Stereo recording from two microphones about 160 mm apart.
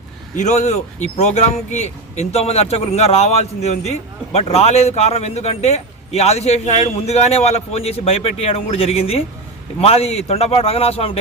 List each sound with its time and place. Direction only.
0.3 s speech: 50° left (ahead or behind)